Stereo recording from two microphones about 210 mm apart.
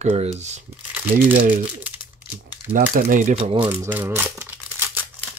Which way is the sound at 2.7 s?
40° right (ahead or behind).